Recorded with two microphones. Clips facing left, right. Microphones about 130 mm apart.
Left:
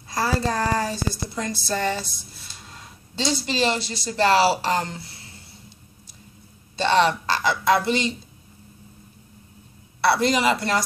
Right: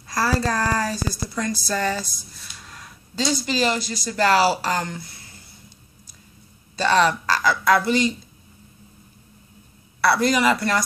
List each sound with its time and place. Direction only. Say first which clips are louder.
0.1 s speech: right 1 dB; 20° left (ahead or behind)
6.8 s speech: even; 25° left (ahead or behind)
10.0 s speech: right 1 dB; 25° left (ahead or behind)